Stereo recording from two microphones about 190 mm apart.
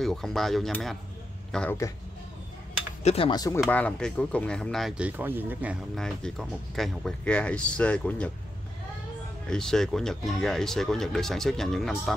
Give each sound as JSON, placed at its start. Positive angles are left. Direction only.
{"t": 0.0, "sound": "a man's voice", "side_deg": 0}
{"t": 3.0, "sound": "speech", "side_deg": 35}
{"t": 3.3, "sound": "speech", "side_deg": 20}
{"t": 3.6, "sound": "speech", "side_deg": 5}
{"t": 5.9, "sound": "speech", "side_deg": 5}
{"t": 9.5, "sound": "speech", "side_deg": 5}